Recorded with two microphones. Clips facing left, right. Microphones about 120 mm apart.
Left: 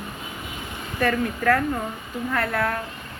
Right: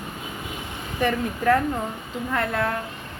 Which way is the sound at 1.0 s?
20° right (ahead or behind).